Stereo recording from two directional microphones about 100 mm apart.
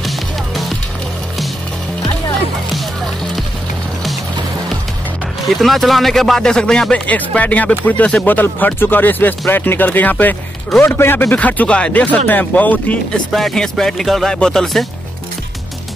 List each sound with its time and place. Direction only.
5.5 s speech: centre (ahead or behind)
13.3 s speech: 5° left (ahead or behind)